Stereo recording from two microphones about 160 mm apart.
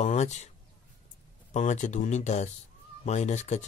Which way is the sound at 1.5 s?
50° left (ahead or behind).